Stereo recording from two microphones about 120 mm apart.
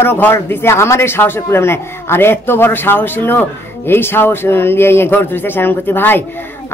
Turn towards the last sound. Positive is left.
turn(degrees=15)  # may be behind; listen again after turning